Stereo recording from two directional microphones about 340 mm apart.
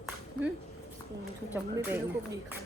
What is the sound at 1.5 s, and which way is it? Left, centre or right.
Speech, centre.